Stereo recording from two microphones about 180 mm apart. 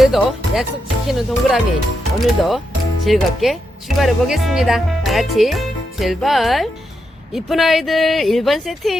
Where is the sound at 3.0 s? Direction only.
Centre (ahead or behind).